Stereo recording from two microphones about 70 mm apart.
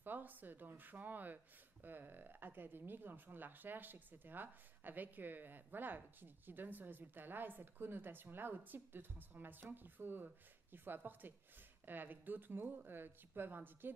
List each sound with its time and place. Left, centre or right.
0.0 s speech: right